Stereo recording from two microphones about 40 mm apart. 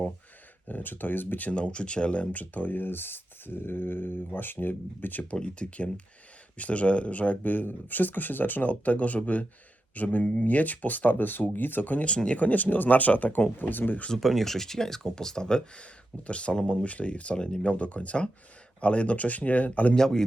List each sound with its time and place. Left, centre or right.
0.7 s speech: left
1.5 s speech: left
2.3 s speech: left
5.3 s speech: left
12.0 s speech: left
12.4 s speech: left
14.2 s speech: centre; by 17.3 s left
17.3 s speech: centre
17.6 s speech: left
20.0 s speech: centre